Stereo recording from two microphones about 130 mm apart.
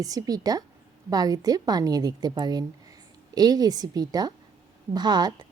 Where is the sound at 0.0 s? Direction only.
30° right (ahead or behind).